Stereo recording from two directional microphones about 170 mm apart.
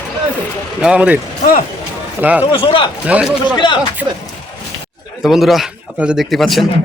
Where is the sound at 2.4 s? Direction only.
30° left (ahead or behind).